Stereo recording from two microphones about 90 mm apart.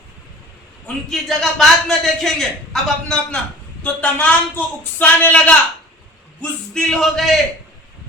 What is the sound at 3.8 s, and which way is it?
A man's voice, 15° left (ahead or behind).